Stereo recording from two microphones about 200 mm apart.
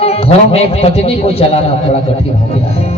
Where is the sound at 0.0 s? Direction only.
30° left (ahead or behind).